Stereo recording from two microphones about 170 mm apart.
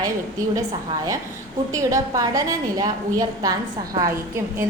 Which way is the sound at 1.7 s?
20° right (ahead or behind).